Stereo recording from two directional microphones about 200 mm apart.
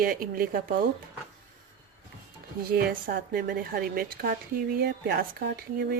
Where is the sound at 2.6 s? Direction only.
45° right (ahead or behind).